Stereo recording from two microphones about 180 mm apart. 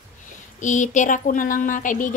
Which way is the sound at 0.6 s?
45° left (ahead or behind).